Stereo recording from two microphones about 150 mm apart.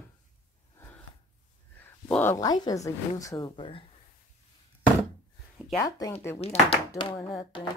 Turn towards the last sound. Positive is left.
turn(degrees=35)  # may be behind; listen again after turning